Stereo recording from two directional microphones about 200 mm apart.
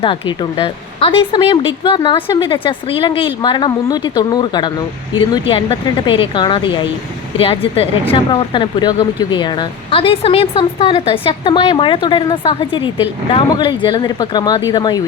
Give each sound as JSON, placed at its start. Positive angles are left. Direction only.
{"t": 0.0, "sound": "speech", "side_deg": 25}